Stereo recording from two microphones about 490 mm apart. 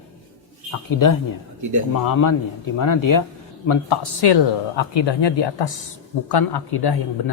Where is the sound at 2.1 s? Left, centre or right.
Left.